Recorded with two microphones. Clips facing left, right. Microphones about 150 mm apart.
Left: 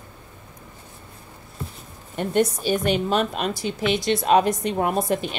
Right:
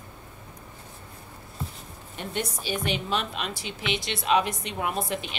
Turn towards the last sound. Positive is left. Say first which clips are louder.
# left 7 dB
turn(degrees=45)  # may be behind; listen again after turning